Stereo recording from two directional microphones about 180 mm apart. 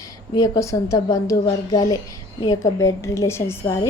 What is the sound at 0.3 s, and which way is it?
A woman's voice, 20° left (ahead or behind).